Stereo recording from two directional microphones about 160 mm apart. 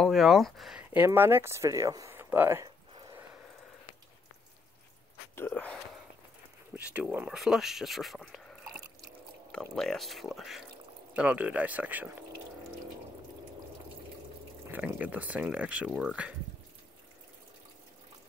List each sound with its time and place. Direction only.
0.0 s speech: centre (ahead or behind)
0.8 s speech: 15° right (ahead or behind)
2.9 s drip: 30° right (ahead or behind)
5.3 s speech: 10° left (ahead or behind)
6.9 s speech: 10° right (ahead or behind)
9.5 s speech: 5° left (ahead or behind)
14.7 s speech: 10° right (ahead or behind)